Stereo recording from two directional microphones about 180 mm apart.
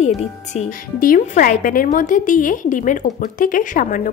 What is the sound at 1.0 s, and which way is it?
A woman's voice, 50° left (ahead or behind).